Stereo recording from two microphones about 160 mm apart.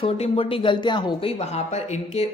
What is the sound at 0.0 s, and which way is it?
Speech, 35° left (ahead or behind).